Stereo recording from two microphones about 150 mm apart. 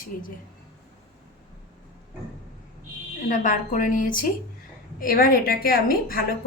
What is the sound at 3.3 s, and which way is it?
A woman's voice, 60° left (ahead or behind).